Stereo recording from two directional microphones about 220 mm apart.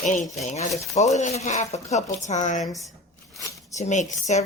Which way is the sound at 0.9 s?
30° left (ahead or behind).